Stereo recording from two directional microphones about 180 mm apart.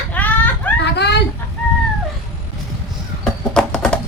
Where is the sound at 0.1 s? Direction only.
10° left (ahead or behind).